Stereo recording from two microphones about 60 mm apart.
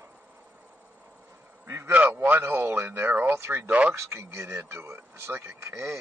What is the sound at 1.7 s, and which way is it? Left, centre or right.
Speech, right.